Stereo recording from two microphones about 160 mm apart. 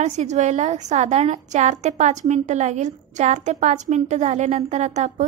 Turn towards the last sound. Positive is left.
turn(degrees=-45)  # may be behind; listen again after turning